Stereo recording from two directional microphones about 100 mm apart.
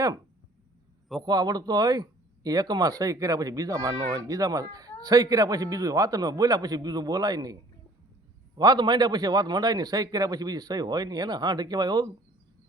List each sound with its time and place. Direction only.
1.2 s speech: 45° right (ahead or behind)
8.5 s a man's voice: 40° right (ahead or behind)